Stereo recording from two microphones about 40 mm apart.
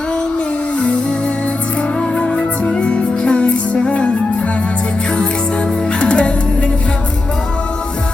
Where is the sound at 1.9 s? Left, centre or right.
Left.